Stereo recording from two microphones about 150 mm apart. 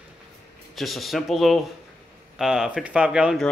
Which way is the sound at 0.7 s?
Centre (ahead or behind).